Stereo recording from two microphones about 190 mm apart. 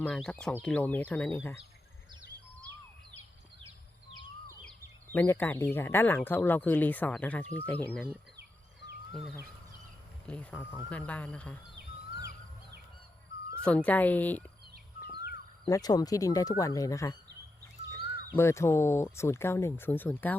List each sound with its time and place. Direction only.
0.0 s speech: 5° left (ahead or behind)
5.1 s speech: 10° left (ahead or behind)
9.1 s speech: centre (ahead or behind)
13.6 s speech: 5° left (ahead or behind)
15.6 s speech: 20° left (ahead or behind)
18.3 s speech: 15° left (ahead or behind)